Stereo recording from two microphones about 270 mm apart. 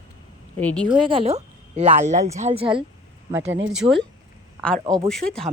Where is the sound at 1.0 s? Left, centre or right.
Centre.